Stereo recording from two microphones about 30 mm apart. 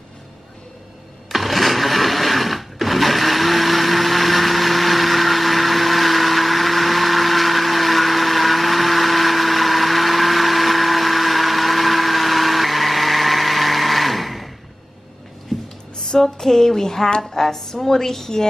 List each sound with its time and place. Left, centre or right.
1.3 s sewing machine: centre
16.0 s female singing: centre
17.2 s a woman's voice: centre